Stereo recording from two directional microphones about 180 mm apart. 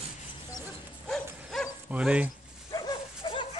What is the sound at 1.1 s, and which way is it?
Dog, centre (ahead or behind).